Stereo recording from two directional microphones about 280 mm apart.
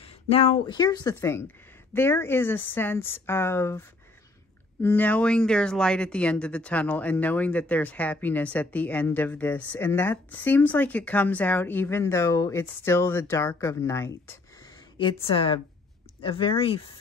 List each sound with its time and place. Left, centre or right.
0.0 s speech: centre
4.8 s speech: centre